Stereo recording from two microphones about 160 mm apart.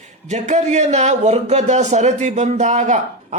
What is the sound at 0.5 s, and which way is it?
A man's voice, 45° right (ahead or behind).